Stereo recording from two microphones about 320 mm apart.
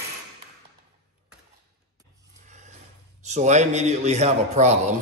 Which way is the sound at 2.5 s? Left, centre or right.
Right.